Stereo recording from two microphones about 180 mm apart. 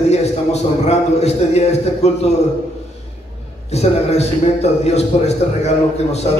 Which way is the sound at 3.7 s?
35° left (ahead or behind).